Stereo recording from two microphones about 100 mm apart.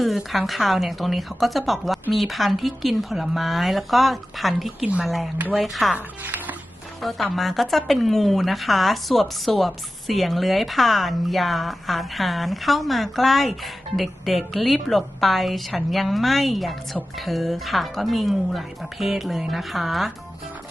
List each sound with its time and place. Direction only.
0.0 s a woman's voice: centre (ahead or behind)
6.2 s a sound: 15° right (ahead or behind)
7.0 s a woman's voice: centre (ahead or behind)